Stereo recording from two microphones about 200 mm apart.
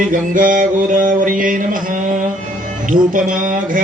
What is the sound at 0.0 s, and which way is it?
Mantra, 40° right (ahead or behind).